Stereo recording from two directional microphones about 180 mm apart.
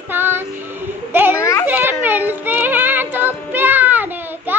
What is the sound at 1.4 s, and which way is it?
Children playing, 15° left (ahead or behind).